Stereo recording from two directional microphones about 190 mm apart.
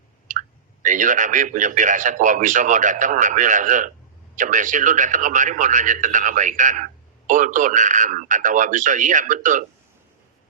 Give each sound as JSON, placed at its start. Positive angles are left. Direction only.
{"t": 0.3, "sound": "a man's voice", "side_deg": -45}